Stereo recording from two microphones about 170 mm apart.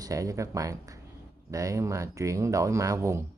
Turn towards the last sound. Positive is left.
turn(degrees=-15)  # may be behind; listen again after turning